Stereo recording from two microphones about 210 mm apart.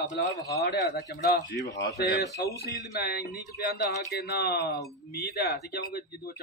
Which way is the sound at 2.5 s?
50° left (ahead or behind).